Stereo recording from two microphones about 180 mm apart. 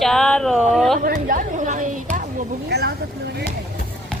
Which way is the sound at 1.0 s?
50° right (ahead or behind).